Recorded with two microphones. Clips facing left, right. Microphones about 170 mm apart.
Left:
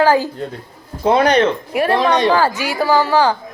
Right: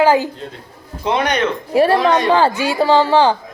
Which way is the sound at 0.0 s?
20° right (ahead or behind).